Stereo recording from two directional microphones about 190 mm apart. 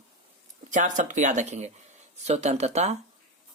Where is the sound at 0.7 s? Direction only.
40° right (ahead or behind).